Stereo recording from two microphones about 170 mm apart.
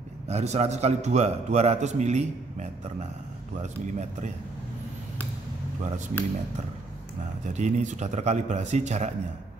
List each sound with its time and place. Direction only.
0.3 s a man's voice: 40° right (ahead or behind)
3.6 s speech: 45° right (ahead or behind)
5.8 s speech: 45° right (ahead or behind)
7.5 s speech: 45° right (ahead or behind)